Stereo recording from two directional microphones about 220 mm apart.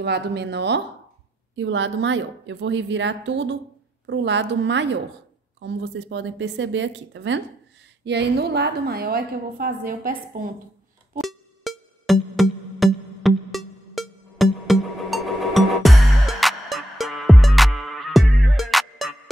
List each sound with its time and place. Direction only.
0.0 s a woman's voice: 50° right (ahead or behind)
11.1 s music: centre (ahead or behind)